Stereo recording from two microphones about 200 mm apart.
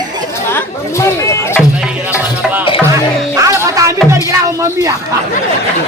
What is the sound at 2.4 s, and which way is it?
Music, 10° right (ahead or behind).